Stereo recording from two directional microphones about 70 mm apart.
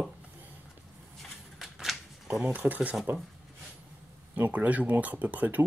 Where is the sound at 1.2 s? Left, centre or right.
Centre.